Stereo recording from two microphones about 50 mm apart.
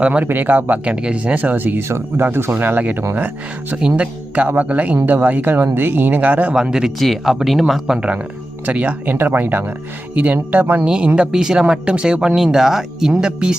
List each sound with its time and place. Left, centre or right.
0.0 s speech: right
0.3 s speech: right
0.9 s speech: right
1.9 s speech: right
3.8 s speech: centre
4.4 s speech: right
6.5 s speech: centre
7.0 s speech: centre
7.7 s speech: centre
8.6 s speech: right
9.1 s speech: right
10.8 s speech: right